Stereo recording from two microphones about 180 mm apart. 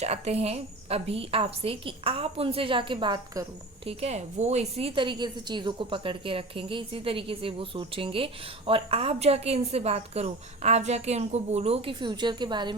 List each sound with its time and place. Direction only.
0.0 s a woman's voice: 35° right (ahead or behind)
3.8 s a woman's voice: 35° right (ahead or behind)